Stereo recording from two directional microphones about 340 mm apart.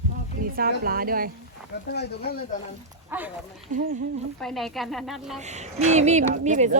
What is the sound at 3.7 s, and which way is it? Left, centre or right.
Speech, right.